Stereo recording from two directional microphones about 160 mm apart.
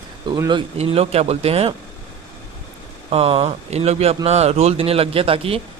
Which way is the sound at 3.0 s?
40° right (ahead or behind).